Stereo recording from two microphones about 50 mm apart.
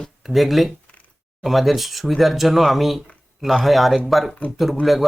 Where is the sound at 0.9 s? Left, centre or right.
Left.